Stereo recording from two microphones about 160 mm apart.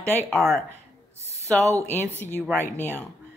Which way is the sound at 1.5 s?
20° right (ahead or behind).